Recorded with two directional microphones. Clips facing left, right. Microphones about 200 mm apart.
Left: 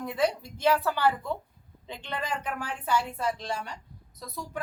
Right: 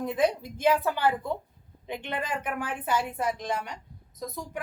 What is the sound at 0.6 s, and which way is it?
A woman's voice, 15° right (ahead or behind).